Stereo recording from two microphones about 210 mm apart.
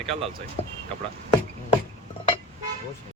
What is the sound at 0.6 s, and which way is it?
Speech, 30° left (ahead or behind).